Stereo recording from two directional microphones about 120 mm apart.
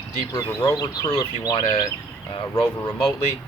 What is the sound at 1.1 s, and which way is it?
Speech, 35° left (ahead or behind).